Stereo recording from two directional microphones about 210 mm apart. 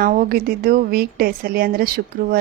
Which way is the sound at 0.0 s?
45° right (ahead or behind).